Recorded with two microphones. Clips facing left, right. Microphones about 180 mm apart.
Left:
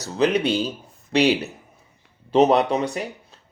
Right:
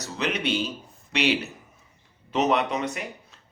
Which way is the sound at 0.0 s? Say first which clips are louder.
Left 8 dB; 35° left (ahead or behind).